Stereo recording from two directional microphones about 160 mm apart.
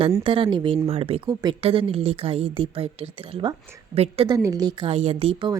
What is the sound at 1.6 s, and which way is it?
A woman's voice, 35° right (ahead or behind).